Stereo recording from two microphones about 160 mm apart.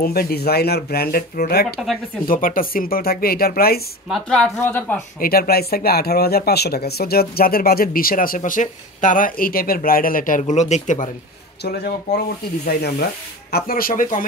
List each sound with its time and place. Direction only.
0.0 s speech: 75° left (ahead or behind)
2.2 s speech: 60° left (ahead or behind)
4.1 s a woman's voice: 5° left (ahead or behind)
5.2 s speech: 70° left (ahead or behind); by 11.1 s 50° left (ahead or behind)
11.6 s speech: 85° left; by 14.2 s 60° left (ahead or behind)